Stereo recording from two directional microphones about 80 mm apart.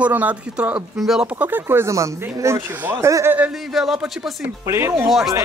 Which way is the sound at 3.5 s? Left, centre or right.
Centre.